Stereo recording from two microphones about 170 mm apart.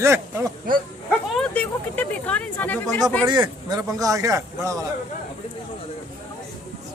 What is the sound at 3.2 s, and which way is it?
A man's voice, 25° right (ahead or behind).